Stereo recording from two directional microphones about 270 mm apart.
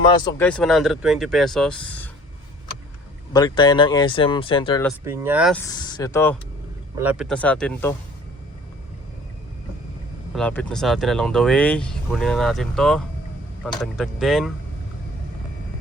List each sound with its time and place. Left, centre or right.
0.1 s speech: centre
3.3 s speech: centre
5.0 s speech: centre
5.6 s speech: centre
7.0 s speech: centre
10.3 s speech: centre